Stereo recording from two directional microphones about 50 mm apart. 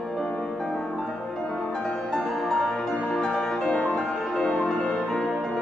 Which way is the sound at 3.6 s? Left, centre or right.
Left.